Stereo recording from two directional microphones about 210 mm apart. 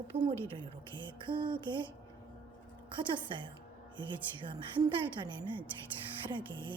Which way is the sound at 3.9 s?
20° right (ahead or behind).